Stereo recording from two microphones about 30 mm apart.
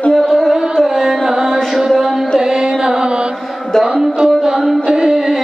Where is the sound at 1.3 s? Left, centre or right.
Right.